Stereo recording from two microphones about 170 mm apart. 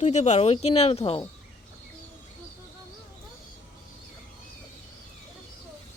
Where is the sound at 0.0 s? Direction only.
45° left (ahead or behind).